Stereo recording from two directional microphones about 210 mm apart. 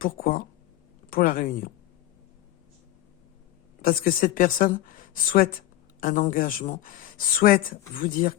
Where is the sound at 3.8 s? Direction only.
45° left (ahead or behind).